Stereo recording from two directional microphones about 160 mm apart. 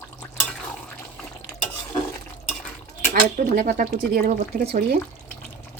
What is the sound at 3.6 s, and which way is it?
Speech, 55° right (ahead or behind).